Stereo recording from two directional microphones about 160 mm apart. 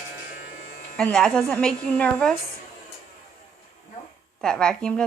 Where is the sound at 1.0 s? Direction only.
5° left (ahead or behind).